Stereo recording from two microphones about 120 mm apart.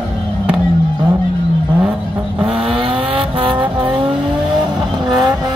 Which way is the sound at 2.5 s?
45° right (ahead or behind).